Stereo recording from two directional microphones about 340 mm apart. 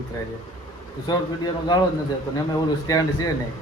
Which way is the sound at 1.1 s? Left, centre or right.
Centre.